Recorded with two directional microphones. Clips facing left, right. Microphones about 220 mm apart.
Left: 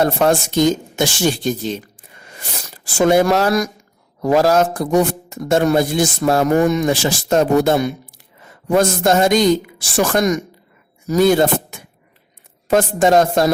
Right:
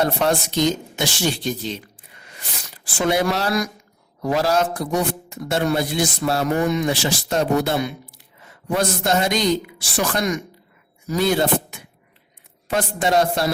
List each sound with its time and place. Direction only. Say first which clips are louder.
0.0 s speech: left 5 dB; 45° left (ahead or behind)